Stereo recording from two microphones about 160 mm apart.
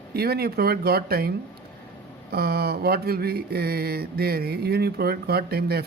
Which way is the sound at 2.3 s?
75° right (ahead or behind).